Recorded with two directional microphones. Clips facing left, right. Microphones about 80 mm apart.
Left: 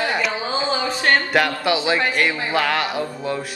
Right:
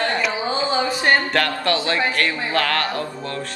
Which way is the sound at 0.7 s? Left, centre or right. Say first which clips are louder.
Right 1 dB; centre.